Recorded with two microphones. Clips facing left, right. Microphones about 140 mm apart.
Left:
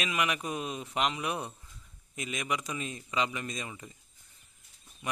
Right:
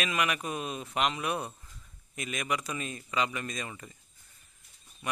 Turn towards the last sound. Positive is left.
turn(degrees=15)  # may be behind; listen again after turning